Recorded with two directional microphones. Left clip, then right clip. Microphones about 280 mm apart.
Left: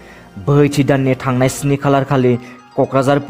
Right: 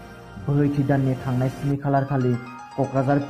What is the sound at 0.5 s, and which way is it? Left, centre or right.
A man's voice, left.